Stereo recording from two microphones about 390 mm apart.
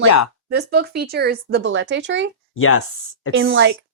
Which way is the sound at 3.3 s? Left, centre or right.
Right.